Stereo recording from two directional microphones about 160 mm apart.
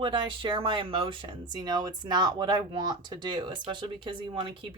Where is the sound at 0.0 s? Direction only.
30° right (ahead or behind).